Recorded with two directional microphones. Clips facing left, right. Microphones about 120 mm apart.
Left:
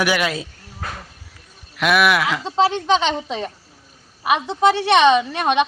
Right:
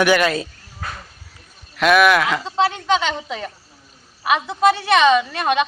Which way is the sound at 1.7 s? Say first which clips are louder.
Right 3 dB; 5° left (ahead or behind).